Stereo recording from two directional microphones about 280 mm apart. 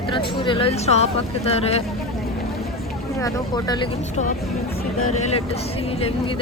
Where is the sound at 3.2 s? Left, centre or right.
Centre.